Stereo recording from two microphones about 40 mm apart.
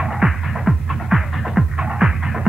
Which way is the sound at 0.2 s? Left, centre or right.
Right.